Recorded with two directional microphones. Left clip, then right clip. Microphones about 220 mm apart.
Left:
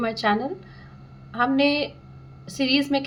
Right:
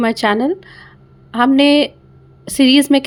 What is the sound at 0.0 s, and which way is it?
A woman's voice, 50° right (ahead or behind).